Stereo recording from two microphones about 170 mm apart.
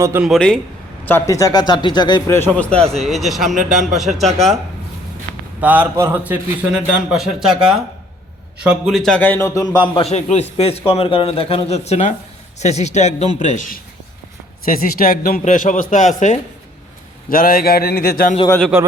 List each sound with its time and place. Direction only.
0.2 s speech: centre (ahead or behind)
1.0 s a man's voice: 15° left (ahead or behind)
3.0 s speech: centre (ahead or behind)
5.5 s a man's voice: 10° right (ahead or behind); by 16.4 s 45° left (ahead or behind)
17.2 s speech: 55° left (ahead or behind)